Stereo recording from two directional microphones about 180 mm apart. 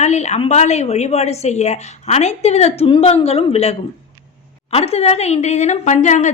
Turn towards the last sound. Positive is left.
turn(degrees=40)  # may be behind; listen again after turning